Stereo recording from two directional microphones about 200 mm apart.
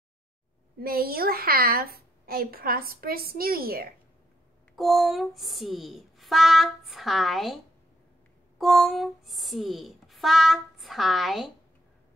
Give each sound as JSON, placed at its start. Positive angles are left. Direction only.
{"t": 0.7, "sound": "a woman's voice", "side_deg": -50}
{"t": 4.7, "sound": "speech", "side_deg": 0}